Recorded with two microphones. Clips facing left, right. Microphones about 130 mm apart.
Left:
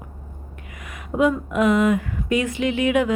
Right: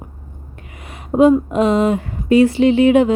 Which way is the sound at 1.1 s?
30° right (ahead or behind).